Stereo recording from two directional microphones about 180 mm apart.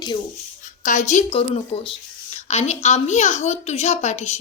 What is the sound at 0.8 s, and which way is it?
A woman's voice, 45° left (ahead or behind).